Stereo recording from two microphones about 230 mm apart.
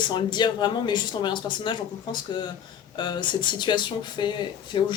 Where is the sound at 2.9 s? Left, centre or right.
Centre.